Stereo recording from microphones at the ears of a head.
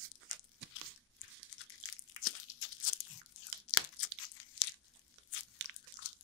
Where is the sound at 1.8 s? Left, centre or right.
Left.